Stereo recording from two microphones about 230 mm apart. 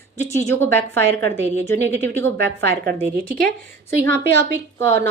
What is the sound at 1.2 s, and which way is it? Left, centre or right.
A woman's voice, right.